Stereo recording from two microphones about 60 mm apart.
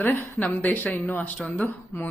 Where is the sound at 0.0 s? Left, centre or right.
Left.